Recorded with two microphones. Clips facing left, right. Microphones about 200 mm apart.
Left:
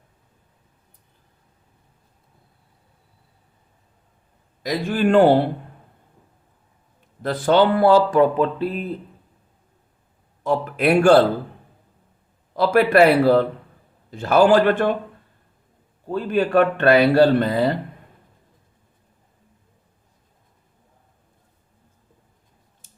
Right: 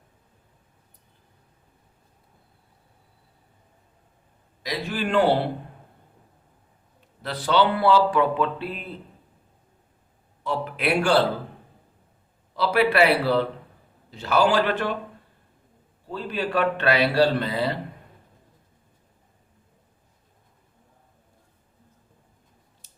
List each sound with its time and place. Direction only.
4.6 s speech: 50° left (ahead or behind)
7.2 s speech: 50° left (ahead or behind)
10.4 s speech: 45° left (ahead or behind)
12.5 s speech: 50° left (ahead or behind)
16.0 s speech: 50° left (ahead or behind)
22.8 s scissors: 50° left (ahead or behind)